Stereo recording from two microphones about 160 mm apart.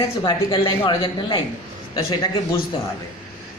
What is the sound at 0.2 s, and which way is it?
Speech, 30° left (ahead or behind).